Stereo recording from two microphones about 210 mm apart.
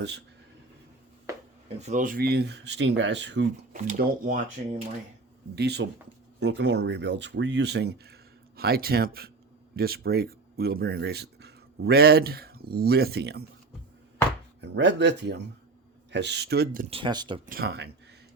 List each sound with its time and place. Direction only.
1.8 s speech: 35° right (ahead or behind); by 3.4 s 60° right (ahead or behind)
3.7 s speech: 40° right (ahead or behind)
5.5 s speech: 55° right (ahead or behind)
14.6 s speech: 55° right (ahead or behind)
16.9 s speech: 20° right (ahead or behind)
17.4 s speech: 45° right (ahead or behind)